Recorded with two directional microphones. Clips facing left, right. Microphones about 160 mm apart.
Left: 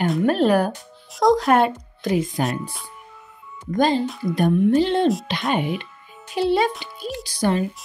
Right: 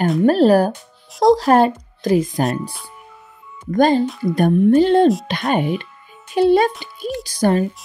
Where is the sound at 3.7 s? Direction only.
50° right (ahead or behind).